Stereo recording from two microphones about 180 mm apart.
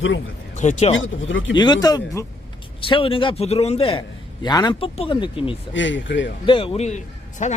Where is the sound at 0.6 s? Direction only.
40° left (ahead or behind).